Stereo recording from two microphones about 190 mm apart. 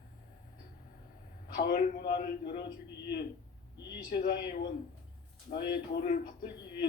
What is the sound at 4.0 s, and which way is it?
A woman's voice, 50° left (ahead or behind).